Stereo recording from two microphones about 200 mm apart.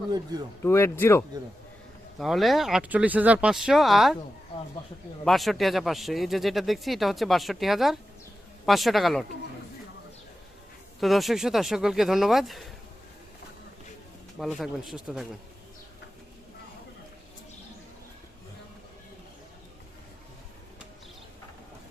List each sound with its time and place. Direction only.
0.1 s speech: 20° right (ahead or behind)
0.6 s speech: 10° left (ahead or behind)
2.1 s speech: centre (ahead or behind)
5.2 s speech: centre (ahead or behind)
11.0 s speech: centre (ahead or behind)
14.3 s speech: centre (ahead or behind)